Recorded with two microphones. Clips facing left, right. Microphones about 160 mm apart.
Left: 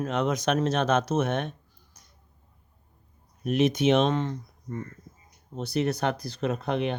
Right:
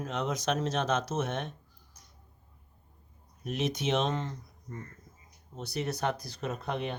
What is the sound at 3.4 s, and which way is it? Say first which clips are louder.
Speech: left 9 dB; 70° left (ahead or behind).